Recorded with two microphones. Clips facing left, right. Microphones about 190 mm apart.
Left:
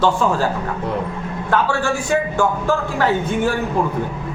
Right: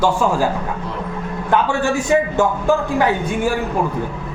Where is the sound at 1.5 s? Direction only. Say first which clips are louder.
Right 2 dB; 15° right (ahead or behind).